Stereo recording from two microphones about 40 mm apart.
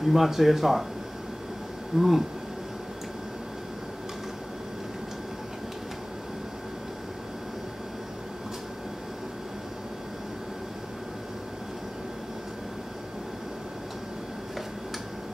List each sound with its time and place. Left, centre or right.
0.0 s speech: centre
2.0 s speech: centre